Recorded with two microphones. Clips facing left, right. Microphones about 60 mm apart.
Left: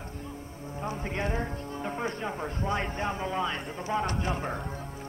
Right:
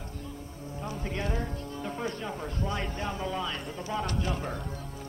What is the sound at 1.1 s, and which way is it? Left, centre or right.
Music, left.